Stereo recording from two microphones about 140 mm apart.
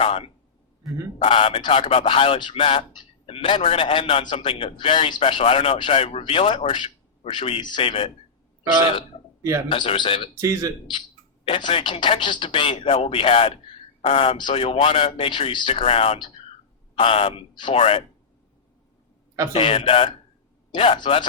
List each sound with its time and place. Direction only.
0.0 s a sound: 40° left (ahead or behind)
0.8 s speech: centre (ahead or behind)
1.2 s a man's voice: 40° left (ahead or behind)
9.6 s a man's voice: 40° left (ahead or behind)
10.3 s a man's voice: 20° right (ahead or behind)
11.4 s a man's voice: 40° left (ahead or behind)
19.5 s a man's voice: 40° left (ahead or behind)